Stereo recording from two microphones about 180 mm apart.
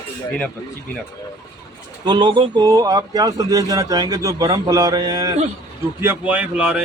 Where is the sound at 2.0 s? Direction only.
25° right (ahead or behind).